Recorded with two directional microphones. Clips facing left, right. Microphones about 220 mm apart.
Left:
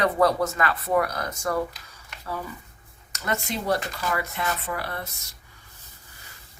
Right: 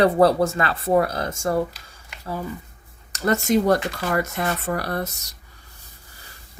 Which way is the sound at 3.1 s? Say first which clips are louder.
Right 10 dB; 40° right (ahead or behind).